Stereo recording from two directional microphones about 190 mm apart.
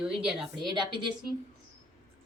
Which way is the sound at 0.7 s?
25° right (ahead or behind).